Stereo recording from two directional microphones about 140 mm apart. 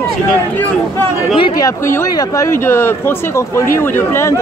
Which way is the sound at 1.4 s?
35° left (ahead or behind).